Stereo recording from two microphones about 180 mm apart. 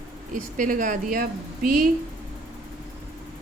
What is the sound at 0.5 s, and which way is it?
Speech, 45° right (ahead or behind).